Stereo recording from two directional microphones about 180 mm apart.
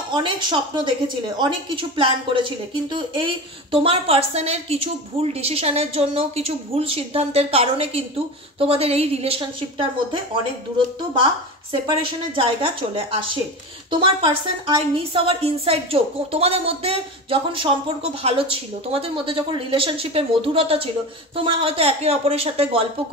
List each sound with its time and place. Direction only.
0.1 s a woman's voice: 25° right (ahead or behind)
11.7 s a woman's voice: 30° right (ahead or behind)